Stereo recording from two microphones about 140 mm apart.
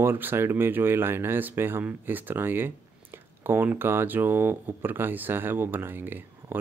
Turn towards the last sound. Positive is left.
turn(degrees=-15)  # may be behind; listen again after turning